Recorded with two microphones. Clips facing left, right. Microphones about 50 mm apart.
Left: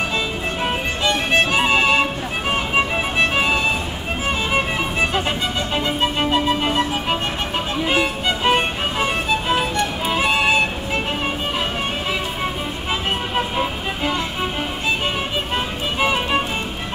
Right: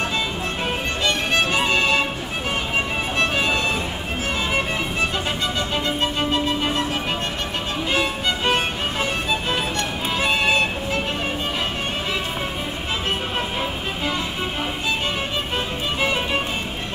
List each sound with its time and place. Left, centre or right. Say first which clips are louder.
1.0 s music: left 3 dB; centre
3.3 s music: left 2 dB; centre
6.1 s music: left 3 dB; centre
16.0 s music: left 4 dB; centre